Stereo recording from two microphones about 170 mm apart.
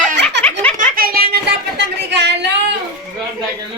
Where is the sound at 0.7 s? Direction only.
60° right (ahead or behind).